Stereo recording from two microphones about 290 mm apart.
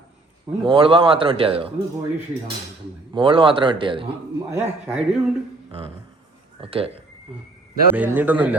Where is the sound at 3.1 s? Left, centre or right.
Centre.